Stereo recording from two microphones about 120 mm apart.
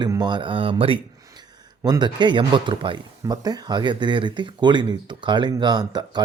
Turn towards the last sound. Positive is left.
turn(degrees=-35)  # may be behind; listen again after turning